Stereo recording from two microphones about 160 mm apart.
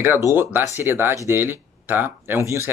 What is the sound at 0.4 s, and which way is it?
Speech, 10° right (ahead or behind).